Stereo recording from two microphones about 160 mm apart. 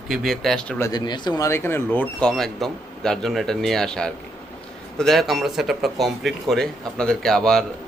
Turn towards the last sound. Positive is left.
turn(degrees=5)  # may be behind; listen again after turning